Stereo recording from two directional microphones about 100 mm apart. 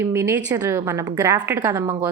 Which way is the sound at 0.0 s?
25° right (ahead or behind).